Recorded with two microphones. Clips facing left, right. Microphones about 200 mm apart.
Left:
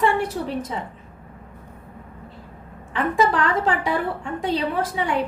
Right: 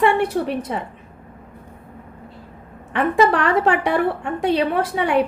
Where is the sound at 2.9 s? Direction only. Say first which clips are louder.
Right 4 dB; 65° right (ahead or behind).